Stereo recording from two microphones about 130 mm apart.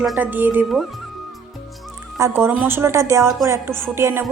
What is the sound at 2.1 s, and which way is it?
A woman's voice, 20° right (ahead or behind).